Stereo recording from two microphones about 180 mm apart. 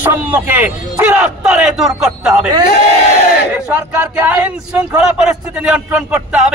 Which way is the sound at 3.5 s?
10° right (ahead or behind).